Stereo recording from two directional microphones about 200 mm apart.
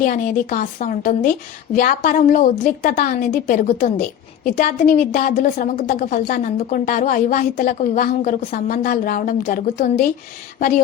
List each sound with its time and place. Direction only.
0.0 s a woman's voice: 45° left (ahead or behind)